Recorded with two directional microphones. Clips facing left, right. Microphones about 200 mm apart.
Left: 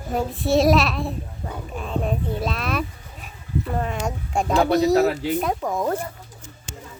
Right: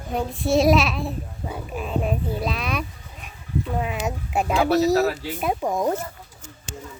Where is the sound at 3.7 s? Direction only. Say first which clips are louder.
Even; 5° right (ahead or behind).